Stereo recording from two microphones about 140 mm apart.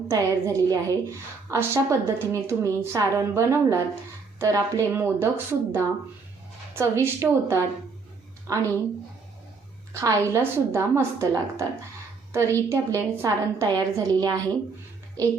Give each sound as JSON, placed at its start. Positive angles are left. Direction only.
{"t": 0.1, "sound": "a woman's voice", "side_deg": -20}
{"t": 9.9, "sound": "a woman's voice", "side_deg": -20}